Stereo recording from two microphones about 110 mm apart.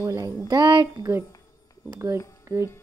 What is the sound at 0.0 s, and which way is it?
A woman's voice, 30° right (ahead or behind).